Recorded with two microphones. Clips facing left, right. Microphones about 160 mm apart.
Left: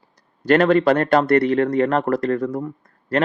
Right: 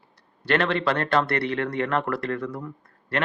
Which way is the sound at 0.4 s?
45° left (ahead or behind).